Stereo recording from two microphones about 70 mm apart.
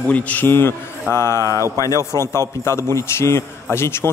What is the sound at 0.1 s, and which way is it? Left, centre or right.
A man's voice, left.